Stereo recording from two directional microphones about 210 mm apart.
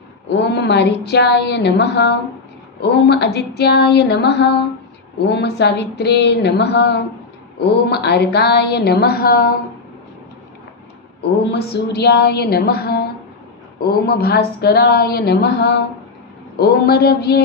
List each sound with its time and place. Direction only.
0.3 s a woman's voice: 55° left (ahead or behind)
11.2 s a woman's voice: 50° left (ahead or behind)